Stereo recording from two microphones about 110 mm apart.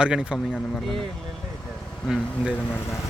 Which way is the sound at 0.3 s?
5° left (ahead or behind).